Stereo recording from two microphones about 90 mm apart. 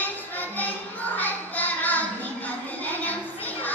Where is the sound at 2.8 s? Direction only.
20° left (ahead or behind).